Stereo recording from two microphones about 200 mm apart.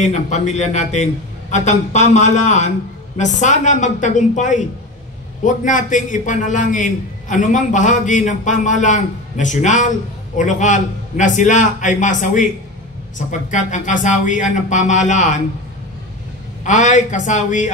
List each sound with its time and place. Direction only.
0.0 s a man's voice: 35° left (ahead or behind)
16.6 s a man's voice: 35° left (ahead or behind)